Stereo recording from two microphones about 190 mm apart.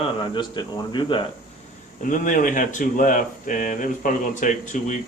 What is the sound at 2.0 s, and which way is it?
Speech, 45° left (ahead or behind).